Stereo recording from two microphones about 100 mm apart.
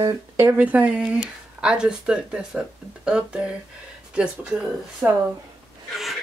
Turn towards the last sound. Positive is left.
turn(degrees=0)  # may be behind; listen again after turning